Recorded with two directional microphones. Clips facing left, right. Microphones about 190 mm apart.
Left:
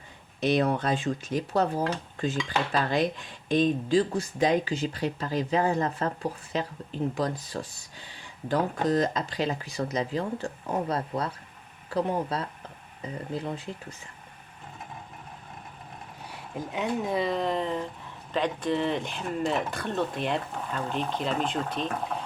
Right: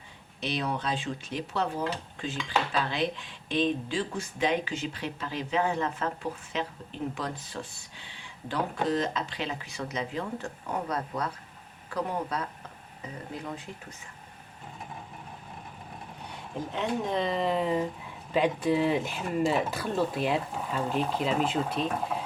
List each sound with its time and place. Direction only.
0.3 s speech: 50° left (ahead or behind); by 13.6 s 30° left (ahead or behind)
16.2 s speech: 5° left (ahead or behind)